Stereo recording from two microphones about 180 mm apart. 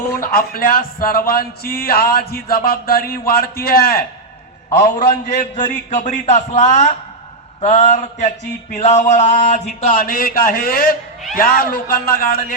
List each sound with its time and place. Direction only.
0.2 s a man's voice: 55° left (ahead or behind)
7.6 s a sound: 40° left (ahead or behind)
9.9 s a man's voice: 55° left (ahead or behind)